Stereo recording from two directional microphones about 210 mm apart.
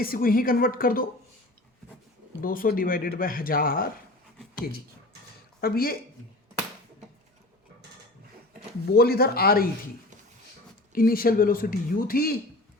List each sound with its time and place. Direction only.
0.0 s speech: 45° left (ahead or behind)
2.4 s speech: 40° left (ahead or behind)
5.5 s speech: 45° left (ahead or behind)
8.9 s speech: 45° left (ahead or behind)
10.9 s speech: 45° left (ahead or behind)